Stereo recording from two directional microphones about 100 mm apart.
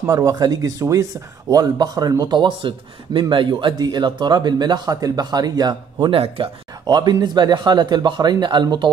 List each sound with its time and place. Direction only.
0.0 s speech: 35° right (ahead or behind); by 3.7 s 55° right (ahead or behind)
3.7 s speech: 45° right (ahead or behind)
6.0 s speech: 70° right (ahead or behind)
6.9 s speech: 45° right (ahead or behind)